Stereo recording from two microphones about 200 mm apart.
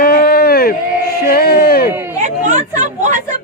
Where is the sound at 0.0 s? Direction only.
50° left (ahead or behind).